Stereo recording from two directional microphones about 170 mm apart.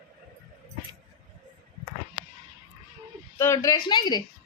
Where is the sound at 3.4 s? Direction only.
20° left (ahead or behind).